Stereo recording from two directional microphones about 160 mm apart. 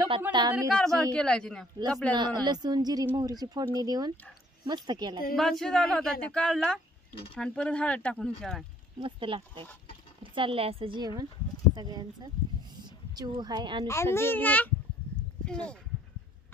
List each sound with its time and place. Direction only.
0.3 s speech: 25° right (ahead or behind)
0.7 s speech: 5° left (ahead or behind)
2.1 s speech: 25° right (ahead or behind)
5.3 s speech: centre (ahead or behind)
9.0 s speech: 35° right (ahead or behind)
14.1 s speech: 15° left (ahead or behind)